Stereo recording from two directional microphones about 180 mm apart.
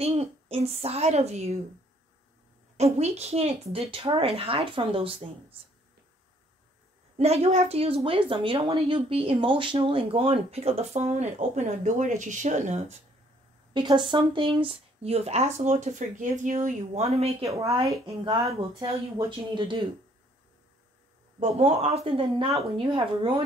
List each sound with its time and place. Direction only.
0.0 s a woman's voice: 35° right (ahead or behind)
2.8 s a woman's voice: 35° right (ahead or behind)
7.2 s a woman's voice: 35° right (ahead or behind)
13.7 s a woman's voice: 25° right (ahead or behind)
17.5 s speech: 15° right (ahead or behind)
18.0 s a woman's voice: 30° right (ahead or behind)
21.4 s a woman's voice: 35° right (ahead or behind)